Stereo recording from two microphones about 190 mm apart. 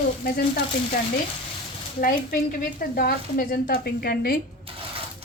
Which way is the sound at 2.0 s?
50° left (ahead or behind).